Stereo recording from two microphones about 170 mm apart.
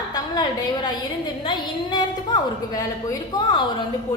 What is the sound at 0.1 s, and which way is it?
A woman's voice, 25° left (ahead or behind).